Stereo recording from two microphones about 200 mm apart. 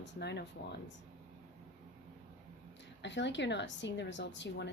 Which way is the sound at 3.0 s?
65° left (ahead or behind).